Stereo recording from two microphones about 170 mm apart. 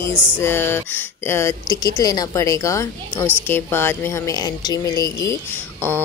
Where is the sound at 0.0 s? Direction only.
15° left (ahead or behind).